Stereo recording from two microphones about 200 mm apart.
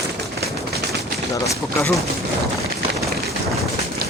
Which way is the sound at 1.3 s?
15° left (ahead or behind).